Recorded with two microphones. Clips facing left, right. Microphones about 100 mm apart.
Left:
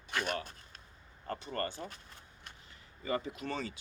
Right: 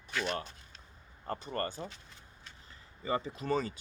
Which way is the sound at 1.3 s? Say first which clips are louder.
Right 1 dB; 35° right (ahead or behind).